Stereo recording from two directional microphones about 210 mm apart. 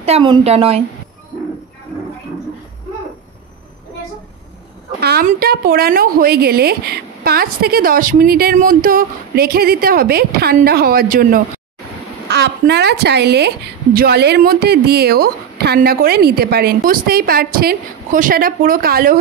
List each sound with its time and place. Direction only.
0.0 s a woman's voice: 25° right (ahead or behind)
5.0 s a woman's voice: 45° right (ahead or behind)
12.3 s a woman's voice: 50° right (ahead or behind)